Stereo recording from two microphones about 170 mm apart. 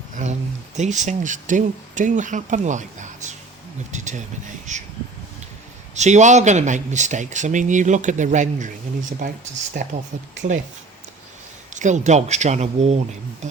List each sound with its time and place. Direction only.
0.2 s a sound: 45° right (ahead or behind)
0.8 s speech: 45° right (ahead or behind)
5.9 s speech: 45° right (ahead or behind)
10.4 s speech: 45° right (ahead or behind)
11.7 s speech: 45° right (ahead or behind)